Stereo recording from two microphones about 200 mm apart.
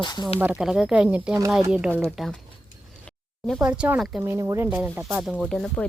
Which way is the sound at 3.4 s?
5° right (ahead or behind).